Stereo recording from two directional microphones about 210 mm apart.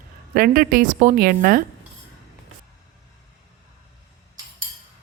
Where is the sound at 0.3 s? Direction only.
45° right (ahead or behind).